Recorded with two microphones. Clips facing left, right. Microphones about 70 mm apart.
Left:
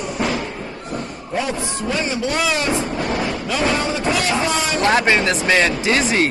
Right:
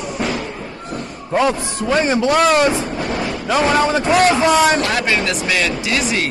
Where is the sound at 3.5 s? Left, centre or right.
Right.